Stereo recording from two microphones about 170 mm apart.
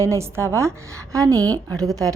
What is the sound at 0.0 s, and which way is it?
A woman's voice, 15° right (ahead or behind).